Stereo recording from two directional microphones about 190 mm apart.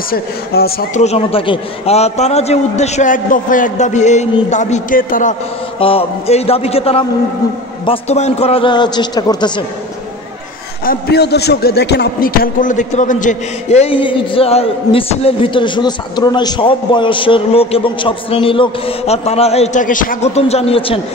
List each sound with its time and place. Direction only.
0.1 s speech: 55° left (ahead or behind)
1.0 s a man's voice: 30° left (ahead or behind)
5.8 s a man's voice: 30° left (ahead or behind)
10.9 s a man's voice: 60° left (ahead or behind); by 21.0 s 30° left (ahead or behind)